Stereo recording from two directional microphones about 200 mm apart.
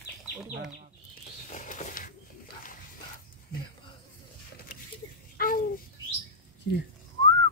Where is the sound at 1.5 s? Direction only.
40° left (ahead or behind).